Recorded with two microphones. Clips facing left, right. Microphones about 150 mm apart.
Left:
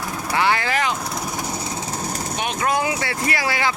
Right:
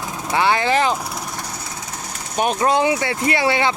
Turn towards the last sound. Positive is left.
turn(degrees=-25)  # may be behind; listen again after turning